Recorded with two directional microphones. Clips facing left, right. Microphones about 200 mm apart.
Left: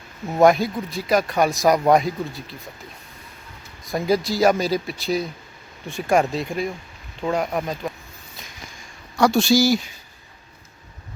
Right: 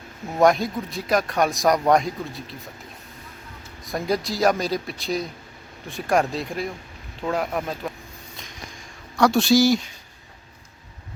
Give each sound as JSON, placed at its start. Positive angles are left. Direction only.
{"t": 0.3, "sound": "speech", "side_deg": 0}
{"t": 3.8, "sound": "speech", "side_deg": 0}
{"t": 9.1, "sound": "speech", "side_deg": 0}